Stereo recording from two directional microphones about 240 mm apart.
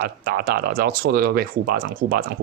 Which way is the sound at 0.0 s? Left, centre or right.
Right.